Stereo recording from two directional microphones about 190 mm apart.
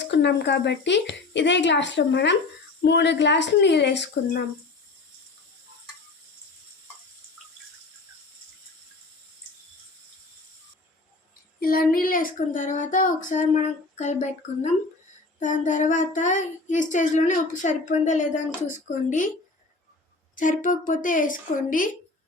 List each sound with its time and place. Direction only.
0.1 s speech: 65° left (ahead or behind)
11.6 s child singing: 50° left (ahead or behind)
20.3 s a woman's voice: 45° left (ahead or behind)